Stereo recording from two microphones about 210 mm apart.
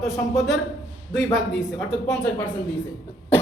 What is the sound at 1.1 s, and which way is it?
A man's voice, centre (ahead or behind).